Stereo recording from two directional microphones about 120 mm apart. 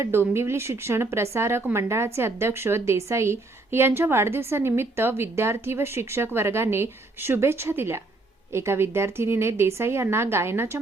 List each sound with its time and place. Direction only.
0.0 s speech: 20° right (ahead or behind)